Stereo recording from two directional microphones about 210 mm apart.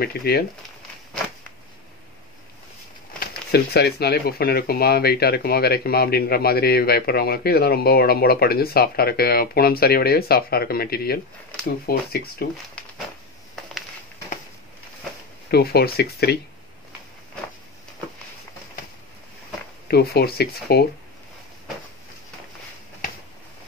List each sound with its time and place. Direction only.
0.0 s speech: 50° left (ahead or behind)
3.2 s speech: 50° left (ahead or behind)
15.5 s speech: 50° left (ahead or behind)
19.9 s speech: 50° left (ahead or behind)